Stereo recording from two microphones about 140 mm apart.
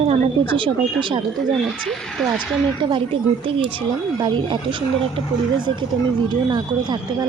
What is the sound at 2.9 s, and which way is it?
Speech, 40° right (ahead or behind).